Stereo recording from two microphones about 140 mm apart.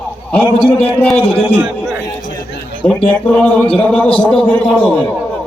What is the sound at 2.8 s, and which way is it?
Speech, 10° left (ahead or behind).